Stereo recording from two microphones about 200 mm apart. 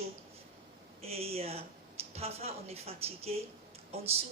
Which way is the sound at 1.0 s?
30° right (ahead or behind).